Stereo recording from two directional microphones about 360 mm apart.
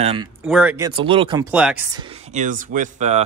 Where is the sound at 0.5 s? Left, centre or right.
Centre.